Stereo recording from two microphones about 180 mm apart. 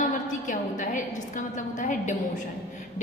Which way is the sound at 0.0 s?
45° left (ahead or behind).